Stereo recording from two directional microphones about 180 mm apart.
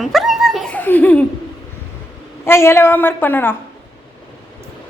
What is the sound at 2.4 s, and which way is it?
A woman's voice, 15° left (ahead or behind).